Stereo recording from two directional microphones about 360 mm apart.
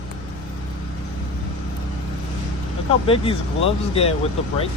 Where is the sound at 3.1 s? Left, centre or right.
Centre.